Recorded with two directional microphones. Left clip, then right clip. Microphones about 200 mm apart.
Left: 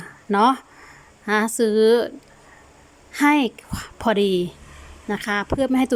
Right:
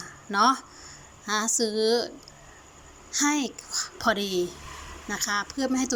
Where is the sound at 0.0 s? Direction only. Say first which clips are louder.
Left 4 dB; 35° left (ahead or behind).